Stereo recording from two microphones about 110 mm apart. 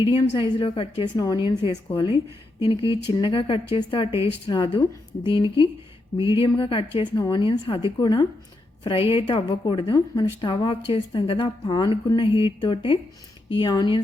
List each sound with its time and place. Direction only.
0.1 s a woman's voice: 55° left (ahead or behind)
1.1 s a woman's voice: 40° left (ahead or behind); by 4.3 s 60° left (ahead or behind)
4.4 s a woman's voice: 45° left (ahead or behind)
7.9 s speech: 40° left (ahead or behind)
8.8 s a woman's voice: 55° left (ahead or behind)
11.6 s a woman's voice: 40° left (ahead or behind)